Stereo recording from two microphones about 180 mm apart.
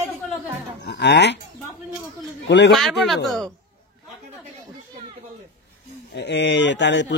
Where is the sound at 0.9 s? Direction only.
70° left (ahead or behind).